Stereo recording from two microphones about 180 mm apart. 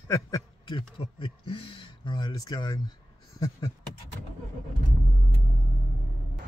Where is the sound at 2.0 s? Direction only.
25° left (ahead or behind).